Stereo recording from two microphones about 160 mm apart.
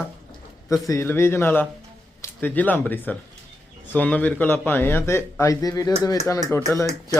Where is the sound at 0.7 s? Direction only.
20° left (ahead or behind).